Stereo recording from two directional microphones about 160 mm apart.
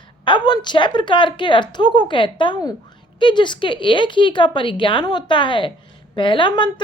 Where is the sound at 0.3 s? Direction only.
30° left (ahead or behind).